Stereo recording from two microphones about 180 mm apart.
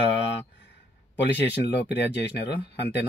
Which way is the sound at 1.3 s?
75° left (ahead or behind).